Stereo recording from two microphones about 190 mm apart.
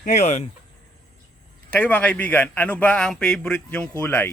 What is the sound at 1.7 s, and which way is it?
A man's voice, 10° left (ahead or behind).